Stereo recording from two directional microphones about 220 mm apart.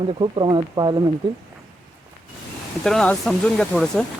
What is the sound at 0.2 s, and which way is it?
Speech, 20° right (ahead or behind).